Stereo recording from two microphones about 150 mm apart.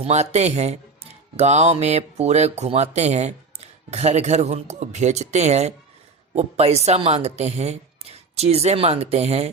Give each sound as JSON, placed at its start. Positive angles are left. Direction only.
{"t": 0.0, "sound": "speech", "side_deg": -45}